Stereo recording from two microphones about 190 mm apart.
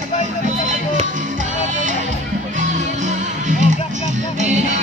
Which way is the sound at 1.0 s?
40° right (ahead or behind).